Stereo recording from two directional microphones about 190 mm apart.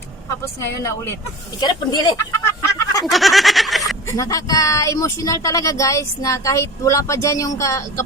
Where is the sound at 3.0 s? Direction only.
Centre (ahead or behind).